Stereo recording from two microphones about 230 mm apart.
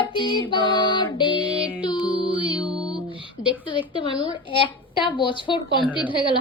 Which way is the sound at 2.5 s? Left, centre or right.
Centre.